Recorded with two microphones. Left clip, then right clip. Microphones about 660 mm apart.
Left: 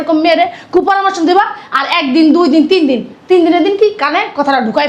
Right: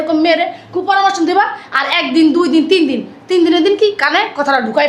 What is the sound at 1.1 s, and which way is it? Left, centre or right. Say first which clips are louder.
A woman's voice: left 2 dB; left.